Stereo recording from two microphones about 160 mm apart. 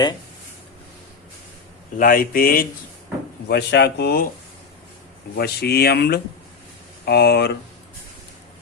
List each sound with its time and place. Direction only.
2.0 s speech: 60° left (ahead or behind)
3.5 s speech: 90° left
5.4 s speech: 85° left